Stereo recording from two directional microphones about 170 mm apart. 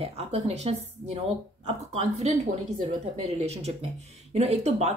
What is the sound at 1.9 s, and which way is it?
Speech, 40° right (ahead or behind).